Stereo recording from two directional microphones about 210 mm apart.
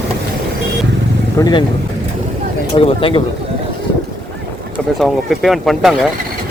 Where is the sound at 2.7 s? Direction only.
25° left (ahead or behind).